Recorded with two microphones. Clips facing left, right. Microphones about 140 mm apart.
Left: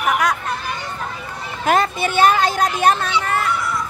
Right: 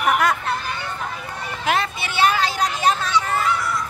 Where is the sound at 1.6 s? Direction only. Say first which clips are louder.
Left 6 dB; 45° left (ahead or behind).